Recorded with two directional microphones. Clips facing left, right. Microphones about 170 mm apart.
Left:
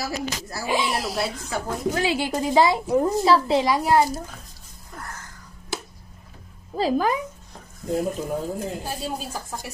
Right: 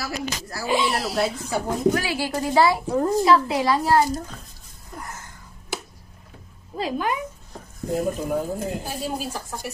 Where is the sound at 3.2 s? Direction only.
30° left (ahead or behind).